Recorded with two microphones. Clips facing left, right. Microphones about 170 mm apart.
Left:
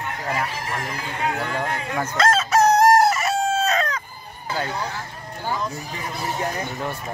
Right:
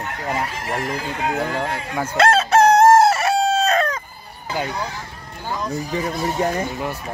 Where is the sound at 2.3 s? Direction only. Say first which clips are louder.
Right 3 dB; 30° right (ahead or behind).